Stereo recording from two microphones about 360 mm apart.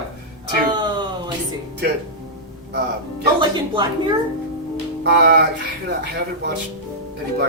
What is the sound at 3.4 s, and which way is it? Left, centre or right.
Speech, centre.